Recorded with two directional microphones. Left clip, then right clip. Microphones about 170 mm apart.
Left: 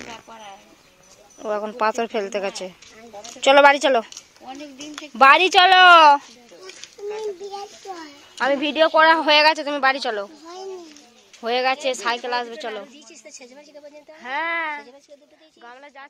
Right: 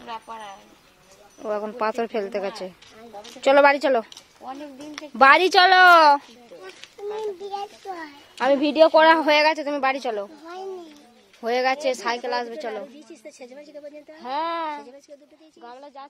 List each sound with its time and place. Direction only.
0.1 s a woman's voice: 25° right (ahead or behind)
1.4 s a woman's voice: centre (ahead or behind)
4.5 s a woman's voice: 35° right (ahead or behind)
5.1 s speech: 15° right (ahead or behind)
7.2 s a child's voice: 10° left (ahead or behind)
8.4 s a woman's voice: 30° right (ahead or behind)
9.2 s speech: 10° right (ahead or behind)
11.4 s speech: 15° right (ahead or behind)
12.9 s speech: 55° right (ahead or behind)
14.2 s a woman's voice: 35° right (ahead or behind)